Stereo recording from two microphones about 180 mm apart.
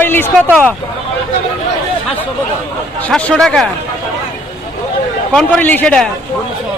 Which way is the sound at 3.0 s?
5° left (ahead or behind).